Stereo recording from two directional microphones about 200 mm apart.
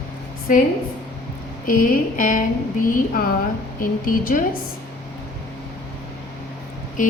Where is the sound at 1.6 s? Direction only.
45° left (ahead or behind).